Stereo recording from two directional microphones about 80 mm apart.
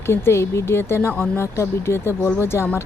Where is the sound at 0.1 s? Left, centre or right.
Left.